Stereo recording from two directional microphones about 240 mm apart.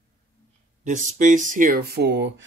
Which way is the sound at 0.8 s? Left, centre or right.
Right.